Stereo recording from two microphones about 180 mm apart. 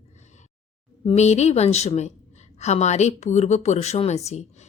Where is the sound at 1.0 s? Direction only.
35° left (ahead or behind).